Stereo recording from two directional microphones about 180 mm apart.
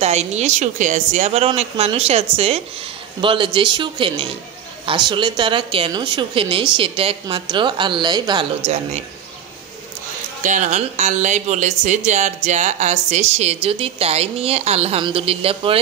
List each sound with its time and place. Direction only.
0.0 s a woman's voice: 35° right (ahead or behind)
10.4 s speech: 45° right (ahead or behind)